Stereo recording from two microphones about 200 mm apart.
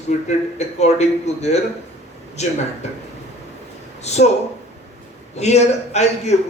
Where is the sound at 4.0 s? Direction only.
35° left (ahead or behind).